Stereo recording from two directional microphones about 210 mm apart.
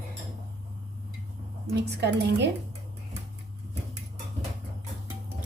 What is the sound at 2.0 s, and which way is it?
Speech, 55° right (ahead or behind).